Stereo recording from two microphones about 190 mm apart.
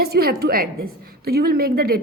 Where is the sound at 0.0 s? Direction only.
55° right (ahead or behind).